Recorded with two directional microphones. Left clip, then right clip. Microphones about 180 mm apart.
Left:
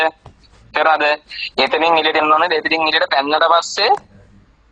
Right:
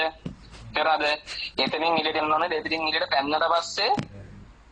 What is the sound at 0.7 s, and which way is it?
Speech, 40° left (ahead or behind).